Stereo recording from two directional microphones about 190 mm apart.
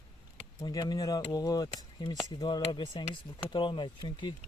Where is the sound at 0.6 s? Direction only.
20° left (ahead or behind).